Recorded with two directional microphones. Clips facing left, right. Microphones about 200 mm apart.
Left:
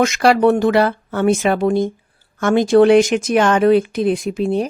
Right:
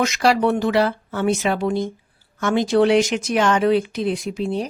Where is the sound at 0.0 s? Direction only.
50° left (ahead or behind).